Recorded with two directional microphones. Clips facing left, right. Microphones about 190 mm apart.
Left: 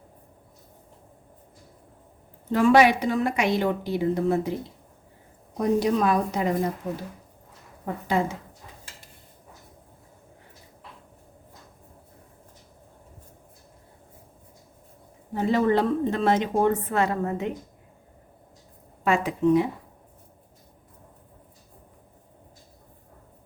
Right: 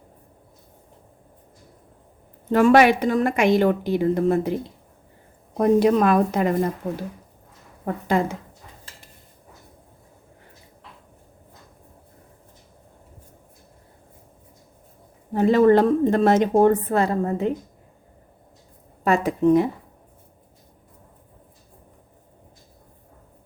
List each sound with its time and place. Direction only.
2.5 s a woman's voice: 55° right (ahead or behind)
5.5 s a woman's voice: 55° right (ahead or behind)
8.0 s a woman's voice: 55° right (ahead or behind)
15.3 s a woman's voice: 55° right (ahead or behind); by 17.5 s 35° right (ahead or behind)
19.0 s a woman's voice: 40° right (ahead or behind)